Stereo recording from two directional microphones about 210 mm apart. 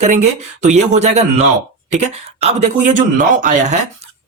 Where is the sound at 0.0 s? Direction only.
35° right (ahead or behind).